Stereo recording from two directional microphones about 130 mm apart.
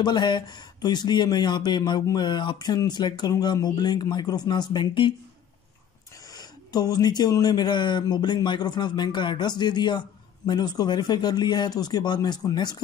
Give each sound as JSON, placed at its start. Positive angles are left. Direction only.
{"t": 0.0, "sound": "speech", "side_deg": 35}
{"t": 6.3, "sound": "speech", "side_deg": 30}